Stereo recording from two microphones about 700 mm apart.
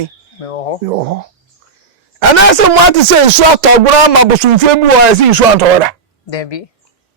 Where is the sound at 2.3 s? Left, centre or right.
Right.